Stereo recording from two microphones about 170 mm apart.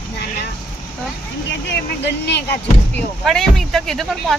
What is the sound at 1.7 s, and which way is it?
Speech, 90° left.